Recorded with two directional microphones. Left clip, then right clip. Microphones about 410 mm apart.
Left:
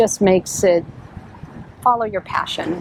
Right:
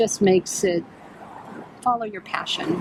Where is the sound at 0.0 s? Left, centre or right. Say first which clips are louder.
Left 4 dB; centre.